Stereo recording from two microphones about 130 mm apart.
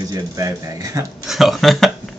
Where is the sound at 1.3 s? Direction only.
Centre (ahead or behind).